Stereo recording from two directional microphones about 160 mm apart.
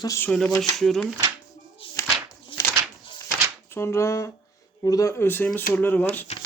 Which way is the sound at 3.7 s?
15° left (ahead or behind).